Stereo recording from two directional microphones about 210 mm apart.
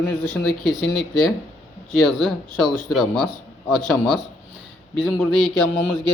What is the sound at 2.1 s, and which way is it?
Speech, centre (ahead or behind).